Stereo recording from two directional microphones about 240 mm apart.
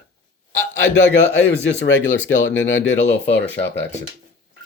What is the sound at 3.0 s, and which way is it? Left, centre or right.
Speech, left.